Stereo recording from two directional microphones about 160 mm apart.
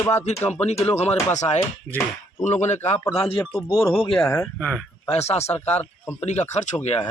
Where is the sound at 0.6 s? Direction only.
40° left (ahead or behind).